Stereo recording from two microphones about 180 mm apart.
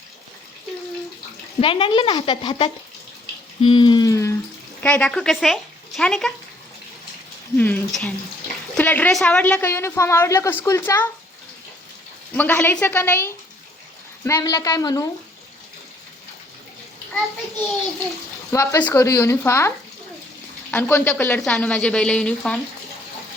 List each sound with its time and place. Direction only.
1.6 s speech: 30° left (ahead or behind)
3.6 s a sound: 25° left (ahead or behind)
4.8 s speech: 10° left (ahead or behind)
7.5 s a woman's voice: 10° left (ahead or behind)
12.3 s a woman's voice: 10° left (ahead or behind)
18.5 s a woman's voice: 15° left (ahead or behind)